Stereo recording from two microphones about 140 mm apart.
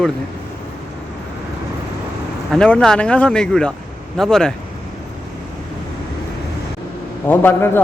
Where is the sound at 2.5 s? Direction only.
5° left (ahead or behind).